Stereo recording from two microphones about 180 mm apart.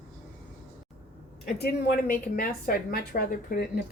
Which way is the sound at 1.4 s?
60° left (ahead or behind).